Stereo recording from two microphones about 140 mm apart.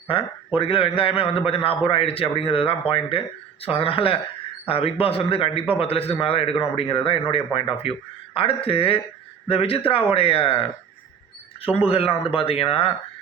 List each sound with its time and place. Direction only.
0.1 s a man's voice: 40° left (ahead or behind)
11.9 s speech: 45° left (ahead or behind)